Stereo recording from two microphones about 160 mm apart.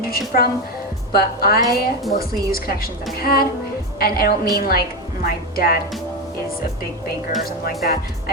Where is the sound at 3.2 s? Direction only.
65° left (ahead or behind).